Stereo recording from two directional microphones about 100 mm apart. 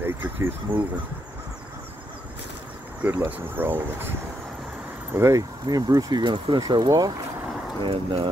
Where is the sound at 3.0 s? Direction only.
20° right (ahead or behind).